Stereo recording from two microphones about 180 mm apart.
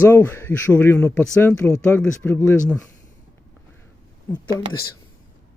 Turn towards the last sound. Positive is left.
turn(degrees=15)  # may be behind; listen again after turning